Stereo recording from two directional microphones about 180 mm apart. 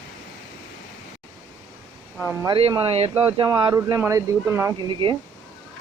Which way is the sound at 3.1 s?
10° right (ahead or behind).